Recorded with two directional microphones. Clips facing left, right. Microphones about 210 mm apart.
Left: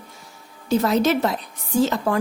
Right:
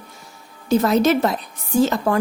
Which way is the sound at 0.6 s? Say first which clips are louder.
Right 3 dB; 50° right (ahead or behind).